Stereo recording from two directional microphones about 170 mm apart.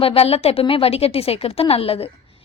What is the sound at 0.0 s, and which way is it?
A woman's voice, 35° left (ahead or behind).